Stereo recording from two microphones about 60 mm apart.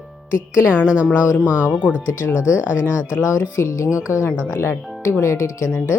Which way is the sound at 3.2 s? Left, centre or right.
Left.